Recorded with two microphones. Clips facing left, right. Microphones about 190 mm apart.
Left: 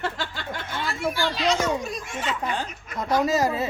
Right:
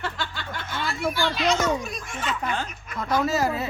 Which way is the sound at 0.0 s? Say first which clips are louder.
Left 2 dB; 40° left (ahead or behind).